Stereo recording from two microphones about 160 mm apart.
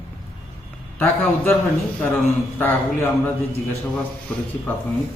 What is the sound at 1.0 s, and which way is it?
Speech, 10° left (ahead or behind).